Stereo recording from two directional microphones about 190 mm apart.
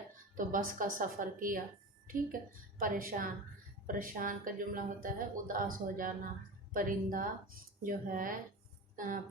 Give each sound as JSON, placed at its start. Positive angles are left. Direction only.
{"t": 0.3, "sound": "speech", "side_deg": -45}
{"t": 2.7, "sound": "speech", "side_deg": -45}